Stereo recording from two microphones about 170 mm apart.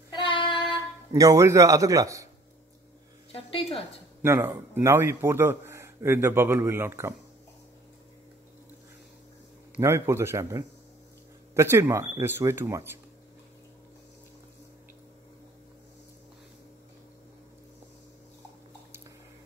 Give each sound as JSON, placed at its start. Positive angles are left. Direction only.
{"t": 0.1, "sound": "child singing", "side_deg": 30}
{"t": 1.1, "sound": "a man's voice", "side_deg": -20}
{"t": 3.3, "sound": "a woman's voice", "side_deg": 35}
{"t": 4.2, "sound": "a man's voice", "side_deg": -15}
{"t": 9.8, "sound": "a man's voice", "side_deg": -15}